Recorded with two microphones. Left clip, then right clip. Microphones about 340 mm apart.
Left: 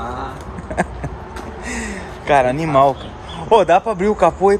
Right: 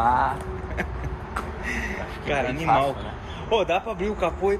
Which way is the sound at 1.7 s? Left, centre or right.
Centre.